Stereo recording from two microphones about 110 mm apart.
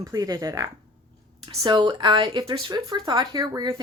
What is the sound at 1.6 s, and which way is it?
Speech, 45° right (ahead or behind).